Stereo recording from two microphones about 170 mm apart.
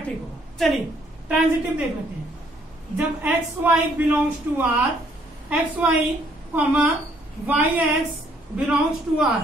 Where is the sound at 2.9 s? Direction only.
10° right (ahead or behind).